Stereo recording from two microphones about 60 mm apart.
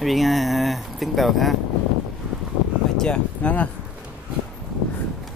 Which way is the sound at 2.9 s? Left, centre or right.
Centre.